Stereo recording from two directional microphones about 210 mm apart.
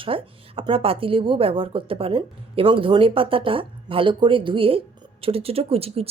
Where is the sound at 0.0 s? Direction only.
25° right (ahead or behind).